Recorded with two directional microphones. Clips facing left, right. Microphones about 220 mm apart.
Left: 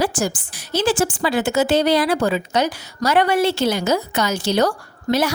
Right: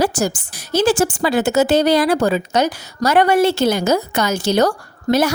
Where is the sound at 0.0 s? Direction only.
40° right (ahead or behind).